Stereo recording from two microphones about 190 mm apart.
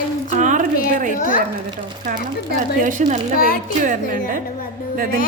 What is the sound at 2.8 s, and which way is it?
Speech, 40° right (ahead or behind).